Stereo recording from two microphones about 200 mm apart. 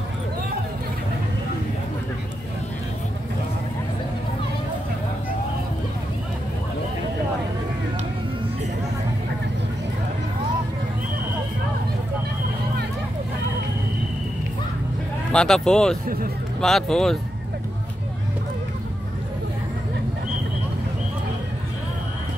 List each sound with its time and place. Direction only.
15.3 s speech: 5° left (ahead or behind)